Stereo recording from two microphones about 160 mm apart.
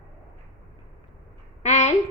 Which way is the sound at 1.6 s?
45° left (ahead or behind).